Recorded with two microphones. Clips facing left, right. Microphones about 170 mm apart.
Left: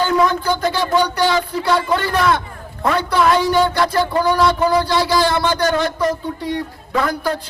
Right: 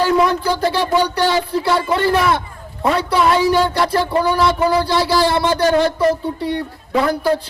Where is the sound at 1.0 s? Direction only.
30° right (ahead or behind).